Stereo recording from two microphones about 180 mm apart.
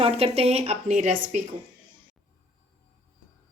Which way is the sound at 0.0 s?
35° right (ahead or behind).